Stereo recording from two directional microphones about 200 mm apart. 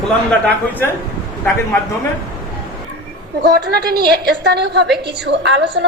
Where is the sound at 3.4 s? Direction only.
50° right (ahead or behind).